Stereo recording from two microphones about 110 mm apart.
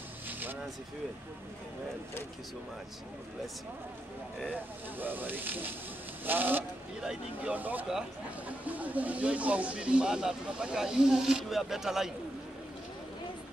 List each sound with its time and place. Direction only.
0.3 s vehicle: 15° right (ahead or behind)
4.6 s speech: 15° right (ahead or behind)